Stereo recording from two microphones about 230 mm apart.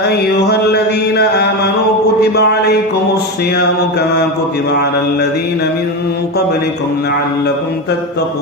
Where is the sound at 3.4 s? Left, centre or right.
Left.